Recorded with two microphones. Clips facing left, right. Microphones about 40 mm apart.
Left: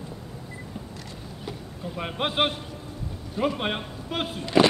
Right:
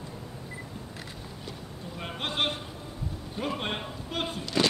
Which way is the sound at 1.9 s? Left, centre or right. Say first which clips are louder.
Left 5 dB; left.